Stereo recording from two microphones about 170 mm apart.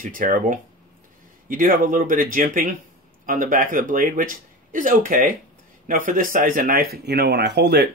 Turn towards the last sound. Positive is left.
turn(degrees=-70)  # may be behind; listen again after turning